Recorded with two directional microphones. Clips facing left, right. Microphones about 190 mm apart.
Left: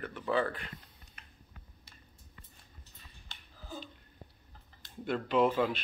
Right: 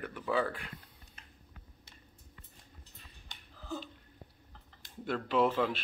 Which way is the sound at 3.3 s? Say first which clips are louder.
Even; 15° right (ahead or behind).